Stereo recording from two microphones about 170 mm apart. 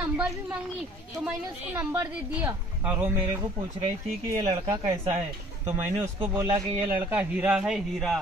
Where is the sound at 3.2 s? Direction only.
25° right (ahead or behind).